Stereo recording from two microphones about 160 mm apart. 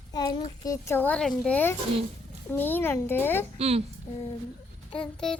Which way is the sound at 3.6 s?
40° right (ahead or behind).